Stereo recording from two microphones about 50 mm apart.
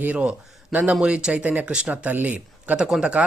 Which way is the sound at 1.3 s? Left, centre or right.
Right.